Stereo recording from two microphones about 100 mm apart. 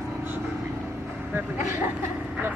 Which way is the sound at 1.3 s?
25° right (ahead or behind).